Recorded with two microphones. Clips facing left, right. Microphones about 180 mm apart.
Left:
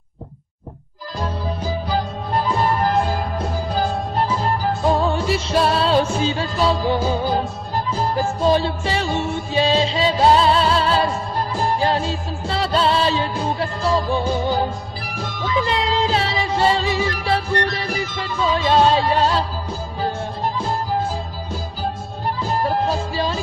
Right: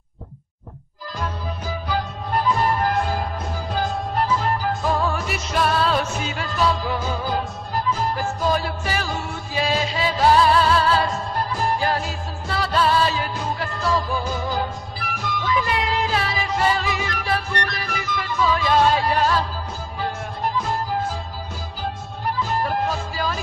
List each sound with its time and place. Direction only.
1.2 s music: 30° left (ahead or behind)
4.8 s music: 25° left (ahead or behind)
22.4 s music: 30° left (ahead or behind)